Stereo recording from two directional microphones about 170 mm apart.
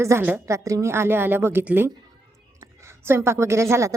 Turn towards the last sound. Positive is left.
turn(degrees=-15)  # may be behind; listen again after turning